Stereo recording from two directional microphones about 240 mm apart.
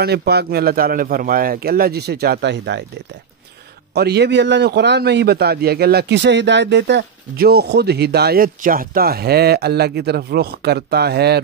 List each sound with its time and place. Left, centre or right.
0.0 s a man's voice: right
3.9 s a man's voice: right